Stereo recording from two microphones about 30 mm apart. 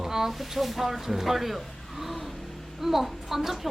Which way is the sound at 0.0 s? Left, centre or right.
Centre.